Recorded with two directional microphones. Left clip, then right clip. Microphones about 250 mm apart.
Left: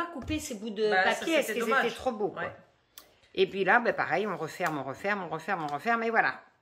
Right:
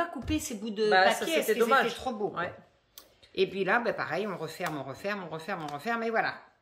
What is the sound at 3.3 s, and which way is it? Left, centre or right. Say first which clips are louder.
Speech: left 3 dB; centre.